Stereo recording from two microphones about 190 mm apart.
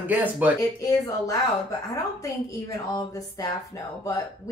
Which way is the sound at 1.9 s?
15° left (ahead or behind).